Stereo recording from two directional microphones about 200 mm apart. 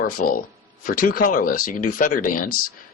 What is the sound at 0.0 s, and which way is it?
Speech, 45° left (ahead or behind).